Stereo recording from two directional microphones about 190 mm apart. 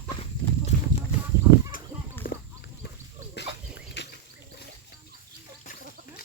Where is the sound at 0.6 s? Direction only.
35° left (ahead or behind).